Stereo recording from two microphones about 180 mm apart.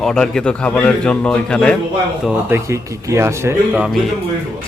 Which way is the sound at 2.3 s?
15° right (ahead or behind).